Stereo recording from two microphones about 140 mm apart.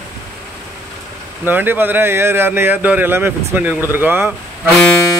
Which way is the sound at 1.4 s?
15° right (ahead or behind).